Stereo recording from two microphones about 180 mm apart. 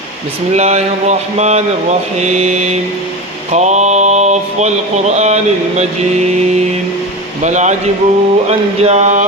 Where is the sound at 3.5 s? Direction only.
40° right (ahead or behind).